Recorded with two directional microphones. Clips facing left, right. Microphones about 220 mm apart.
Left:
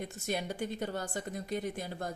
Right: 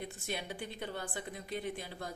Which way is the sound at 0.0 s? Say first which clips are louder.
Left 5 dB; 45° left (ahead or behind).